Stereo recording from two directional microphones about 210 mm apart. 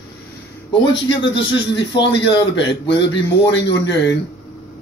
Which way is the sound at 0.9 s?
60° left (ahead or behind).